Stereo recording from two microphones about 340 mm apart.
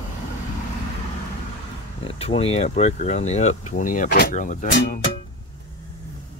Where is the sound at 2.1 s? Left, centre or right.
Centre.